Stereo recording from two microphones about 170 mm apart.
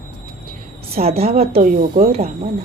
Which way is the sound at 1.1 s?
35° right (ahead or behind).